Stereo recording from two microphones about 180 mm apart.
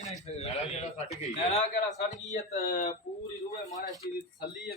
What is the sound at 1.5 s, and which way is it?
A man's voice, 40° left (ahead or behind).